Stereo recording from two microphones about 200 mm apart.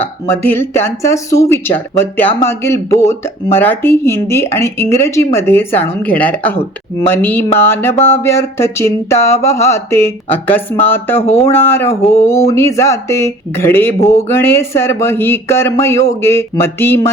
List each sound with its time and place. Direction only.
0.0 s speech: 10° left (ahead or behind)
11.2 s speech: 30° left (ahead or behind)
11.4 s speech: 10° left (ahead or behind)